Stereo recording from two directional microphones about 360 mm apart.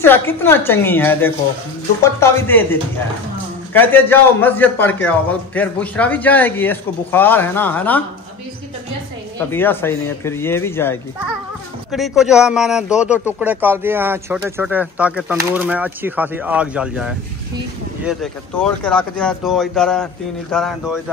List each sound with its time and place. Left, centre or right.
0.0 s a man's voice: centre
9.5 s a man's voice: centre